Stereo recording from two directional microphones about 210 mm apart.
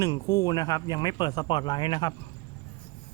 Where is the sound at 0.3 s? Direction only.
15° left (ahead or behind).